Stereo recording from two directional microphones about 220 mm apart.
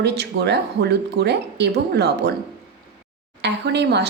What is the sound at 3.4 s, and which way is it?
Speech, 50° right (ahead or behind).